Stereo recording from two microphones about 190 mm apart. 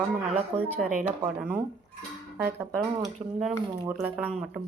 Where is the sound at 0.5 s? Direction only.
30° right (ahead or behind).